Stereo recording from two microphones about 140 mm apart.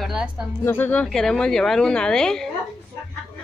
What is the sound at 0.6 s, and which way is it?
A woman's voice, 15° left (ahead or behind).